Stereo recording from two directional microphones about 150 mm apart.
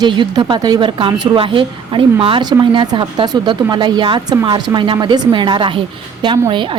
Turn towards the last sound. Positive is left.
turn(degrees=-35)  # may be behind; listen again after turning